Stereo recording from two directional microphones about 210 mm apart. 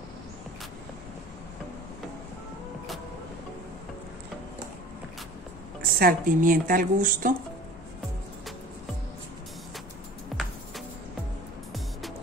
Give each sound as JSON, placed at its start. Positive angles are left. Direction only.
{"t": 5.8, "sound": "speech", "side_deg": -45}